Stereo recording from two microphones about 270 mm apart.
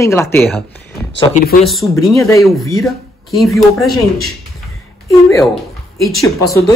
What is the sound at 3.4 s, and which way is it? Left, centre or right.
Speech, centre.